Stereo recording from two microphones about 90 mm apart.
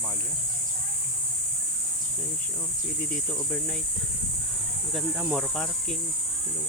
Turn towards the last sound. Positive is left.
turn(degrees=10)  # may be behind; listen again after turning